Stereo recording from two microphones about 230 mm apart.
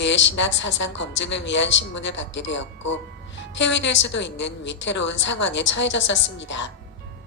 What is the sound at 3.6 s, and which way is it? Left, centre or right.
A woman's voice, left.